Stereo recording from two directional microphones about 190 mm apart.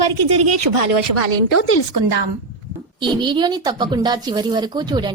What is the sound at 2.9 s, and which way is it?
A woman's voice, 25° right (ahead or behind).